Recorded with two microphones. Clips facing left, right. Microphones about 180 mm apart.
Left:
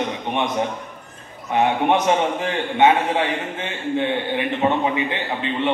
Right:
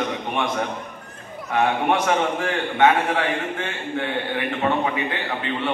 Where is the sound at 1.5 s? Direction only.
20° left (ahead or behind).